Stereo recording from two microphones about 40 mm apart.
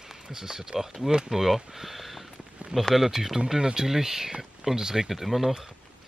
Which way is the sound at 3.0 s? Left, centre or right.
Centre.